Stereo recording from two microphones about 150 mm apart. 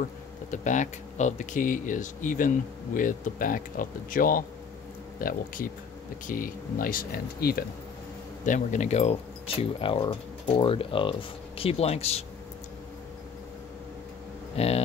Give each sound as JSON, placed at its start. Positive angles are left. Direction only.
{"t": 0.5, "sound": "speech", "side_deg": 55}
{"t": 8.5, "sound": "speech", "side_deg": 55}
{"t": 9.6, "sound": "speech", "side_deg": 35}
{"t": 14.6, "sound": "speech", "side_deg": 40}